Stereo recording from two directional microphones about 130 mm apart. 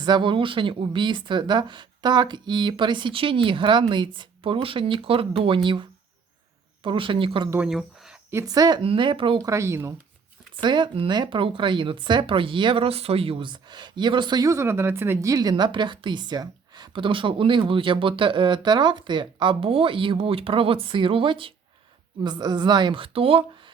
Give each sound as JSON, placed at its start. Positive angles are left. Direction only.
{"t": 0.0, "sound": "speech", "side_deg": -35}
{"t": 7.6, "sound": "speech", "side_deg": -5}
{"t": 8.3, "sound": "speech", "side_deg": -25}
{"t": 8.8, "sound": "speech", "side_deg": -45}
{"t": 9.4, "sound": "speech", "side_deg": -25}
{"t": 10.5, "sound": "speech", "side_deg": -35}